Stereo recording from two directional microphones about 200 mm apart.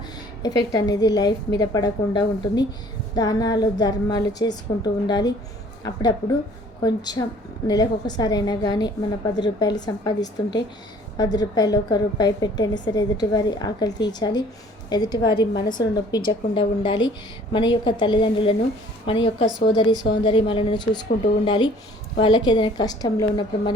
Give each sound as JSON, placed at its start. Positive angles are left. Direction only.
{"t": 0.4, "sound": "a woman's voice", "side_deg": 20}